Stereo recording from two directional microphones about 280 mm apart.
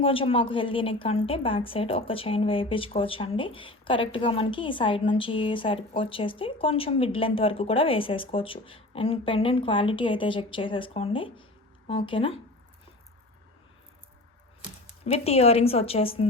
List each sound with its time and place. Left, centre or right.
0.0 s a woman's voice: centre
15.0 s a woman's voice: left